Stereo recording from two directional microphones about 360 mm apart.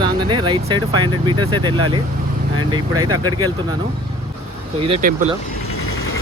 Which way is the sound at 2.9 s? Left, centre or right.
Right.